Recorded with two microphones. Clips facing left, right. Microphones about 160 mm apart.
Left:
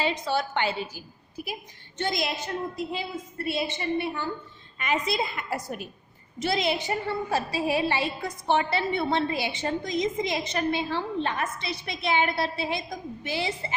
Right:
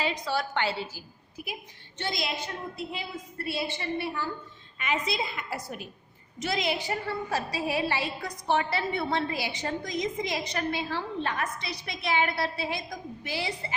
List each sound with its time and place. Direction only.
0.0 s a woman's voice: 25° left (ahead or behind)
1.4 s a woman's voice: 35° left (ahead or behind)
2.0 s a woman's voice: 50° left (ahead or behind)
2.9 s a woman's voice: 25° left (ahead or behind)
4.8 s a woman's voice: 45° left (ahead or behind)
6.4 s a woman's voice: 30° left (ahead or behind)